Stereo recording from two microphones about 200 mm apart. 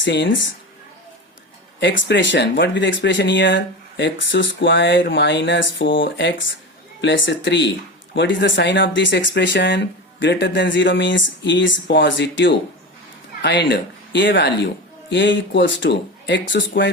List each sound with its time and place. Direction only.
0.0 s speech: 65° left (ahead or behind)
1.8 s speech: 65° left (ahead or behind)